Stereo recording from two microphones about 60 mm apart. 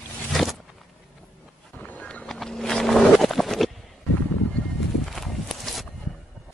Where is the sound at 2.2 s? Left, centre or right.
Centre.